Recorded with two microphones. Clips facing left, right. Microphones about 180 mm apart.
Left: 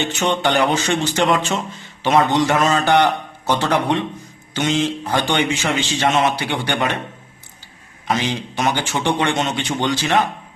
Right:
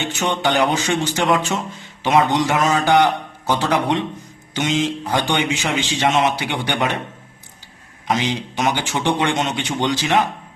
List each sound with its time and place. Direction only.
0.2 s a man's voice: 10° right (ahead or behind)
8.0 s a man's voice: 15° right (ahead or behind)